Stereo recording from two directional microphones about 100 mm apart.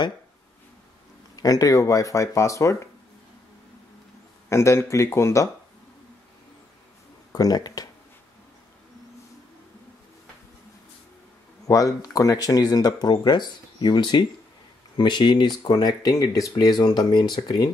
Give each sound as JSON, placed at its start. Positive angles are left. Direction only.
{"t": 1.3, "sound": "speech", "side_deg": 35}
{"t": 4.5, "sound": "speech", "side_deg": 30}
{"t": 7.3, "sound": "speech", "side_deg": 40}
{"t": 11.6, "sound": "speech", "side_deg": 35}